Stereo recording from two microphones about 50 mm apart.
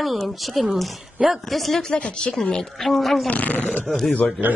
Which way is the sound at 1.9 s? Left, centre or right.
Left.